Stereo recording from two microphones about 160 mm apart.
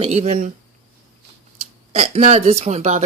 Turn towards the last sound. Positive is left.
turn(degrees=-40)  # may be behind; listen again after turning